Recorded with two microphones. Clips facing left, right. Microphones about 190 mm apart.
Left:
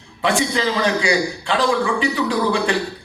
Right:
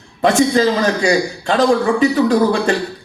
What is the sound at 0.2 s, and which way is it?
A man's voice, 45° right (ahead or behind).